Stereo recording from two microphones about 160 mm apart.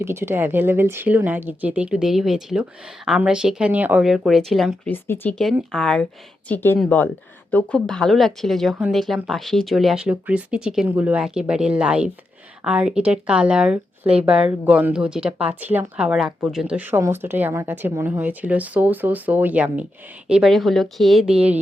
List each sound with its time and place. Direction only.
0.0 s speech: 15° right (ahead or behind); by 4.7 s centre (ahead or behind)
4.9 s speech: 15° left (ahead or behind)
5.4 s speech: centre (ahead or behind)
6.7 s speech: centre (ahead or behind)